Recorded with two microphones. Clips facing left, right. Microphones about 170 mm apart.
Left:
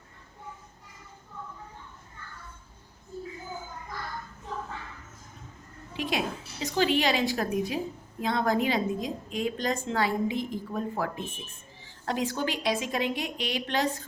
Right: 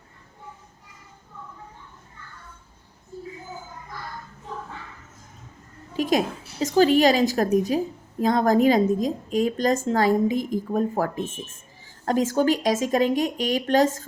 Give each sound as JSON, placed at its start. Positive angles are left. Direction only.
{"t": 5.9, "sound": "a woman's voice", "side_deg": -40}